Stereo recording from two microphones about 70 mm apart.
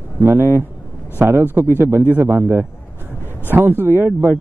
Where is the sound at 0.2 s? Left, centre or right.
Right.